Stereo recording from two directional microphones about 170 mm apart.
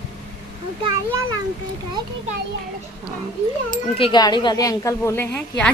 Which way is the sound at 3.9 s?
30° left (ahead or behind).